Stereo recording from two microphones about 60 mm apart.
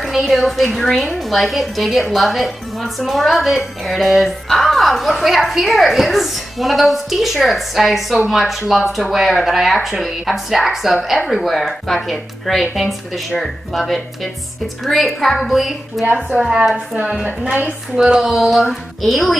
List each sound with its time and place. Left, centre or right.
0.0 s a woman's voice: centre
16.7 s a woman's voice: centre
17.9 s a woman's voice: centre